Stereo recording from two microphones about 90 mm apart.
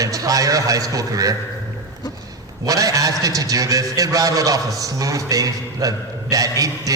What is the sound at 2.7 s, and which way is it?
A man's voice, 40° right (ahead or behind).